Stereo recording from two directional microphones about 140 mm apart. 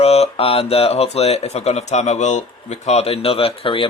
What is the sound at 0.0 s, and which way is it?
Speech, 45° left (ahead or behind).